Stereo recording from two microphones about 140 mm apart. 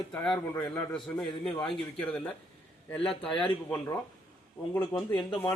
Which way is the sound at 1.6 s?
5° left (ahead or behind).